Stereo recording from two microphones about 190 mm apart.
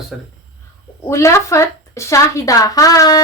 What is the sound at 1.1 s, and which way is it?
A woman's voice, 15° left (ahead or behind).